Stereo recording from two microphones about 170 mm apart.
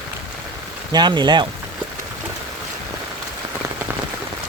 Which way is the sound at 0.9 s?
25° right (ahead or behind).